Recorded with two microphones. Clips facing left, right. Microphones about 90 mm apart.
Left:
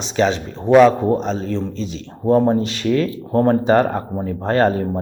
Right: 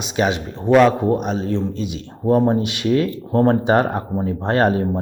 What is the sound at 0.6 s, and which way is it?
Speech, 5° left (ahead or behind).